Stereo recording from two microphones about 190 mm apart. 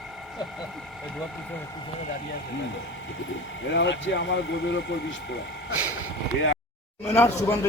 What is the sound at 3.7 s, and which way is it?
Speech, 70° left (ahead or behind).